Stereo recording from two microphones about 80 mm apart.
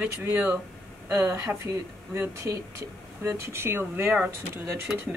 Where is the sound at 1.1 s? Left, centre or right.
Right.